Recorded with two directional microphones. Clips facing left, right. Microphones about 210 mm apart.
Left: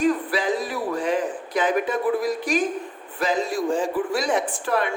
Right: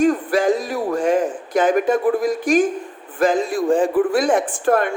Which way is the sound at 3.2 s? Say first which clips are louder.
Right 6 dB; 50° right (ahead or behind).